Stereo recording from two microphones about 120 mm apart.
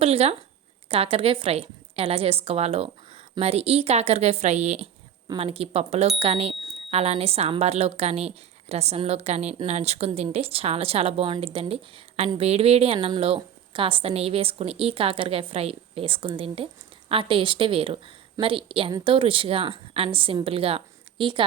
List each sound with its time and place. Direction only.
0.0 s a woman's voice: 60° right (ahead or behind)
5.4 s a woman's voice: 55° right (ahead or behind)